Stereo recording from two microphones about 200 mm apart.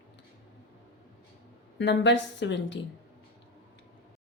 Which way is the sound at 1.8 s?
65° left (ahead or behind).